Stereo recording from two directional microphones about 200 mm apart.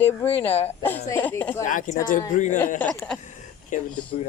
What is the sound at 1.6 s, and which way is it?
Speech, 40° left (ahead or behind).